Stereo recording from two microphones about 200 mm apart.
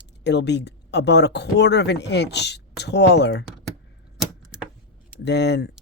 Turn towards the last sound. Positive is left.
turn(degrees=60)  # may be behind; listen again after turning